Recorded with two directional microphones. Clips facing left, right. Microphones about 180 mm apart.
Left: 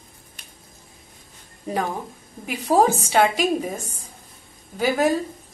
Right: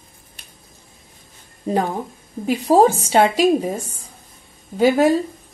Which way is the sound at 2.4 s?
30° right (ahead or behind).